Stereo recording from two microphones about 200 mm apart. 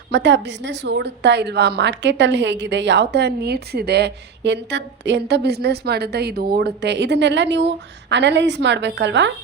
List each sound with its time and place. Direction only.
0.1 s a woman's voice: 60° right (ahead or behind)